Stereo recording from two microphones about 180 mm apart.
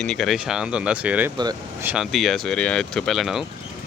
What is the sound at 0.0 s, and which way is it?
Speech, centre (ahead or behind).